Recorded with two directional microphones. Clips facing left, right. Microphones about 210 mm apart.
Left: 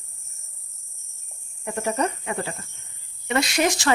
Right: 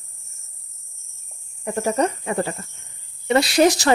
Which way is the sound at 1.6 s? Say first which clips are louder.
Right 4 dB; 40° right (ahead or behind).